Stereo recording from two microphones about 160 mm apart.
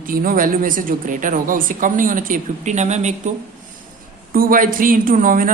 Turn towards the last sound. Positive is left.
turn(degrees=-55)  # may be behind; listen again after turning